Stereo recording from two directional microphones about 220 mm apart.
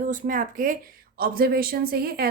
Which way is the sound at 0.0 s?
35° right (ahead or behind).